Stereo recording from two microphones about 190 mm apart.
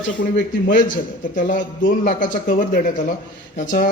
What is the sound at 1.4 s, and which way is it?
A man's voice, 45° left (ahead or behind).